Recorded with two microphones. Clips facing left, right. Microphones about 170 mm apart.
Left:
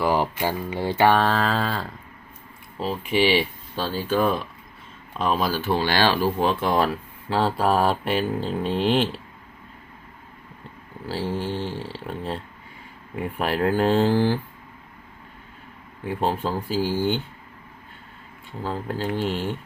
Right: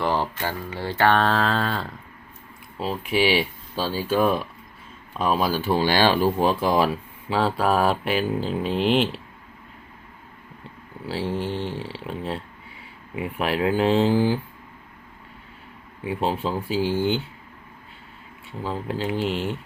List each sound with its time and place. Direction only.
0.0 s a sound: 10° left (ahead or behind)
1.2 s speech: centre (ahead or behind)
11.1 s speech: centre (ahead or behind)
16.0 s speech: 5° right (ahead or behind)
18.6 s speech: centre (ahead or behind)